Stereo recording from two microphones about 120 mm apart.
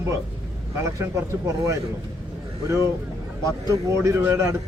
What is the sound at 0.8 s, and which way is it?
Speech, 25° right (ahead or behind).